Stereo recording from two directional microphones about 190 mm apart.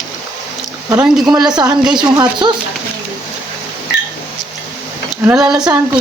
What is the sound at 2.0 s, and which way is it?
Speech, 25° right (ahead or behind).